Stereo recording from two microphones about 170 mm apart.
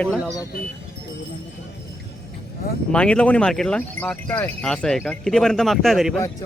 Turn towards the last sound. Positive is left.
turn(degrees=0)  # may be behind; listen again after turning